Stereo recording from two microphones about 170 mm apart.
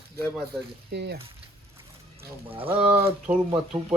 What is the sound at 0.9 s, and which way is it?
Speech, 75° right (ahead or behind).